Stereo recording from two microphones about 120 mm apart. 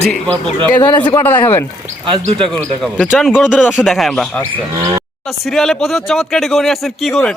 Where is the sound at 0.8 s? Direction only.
40° left (ahead or behind).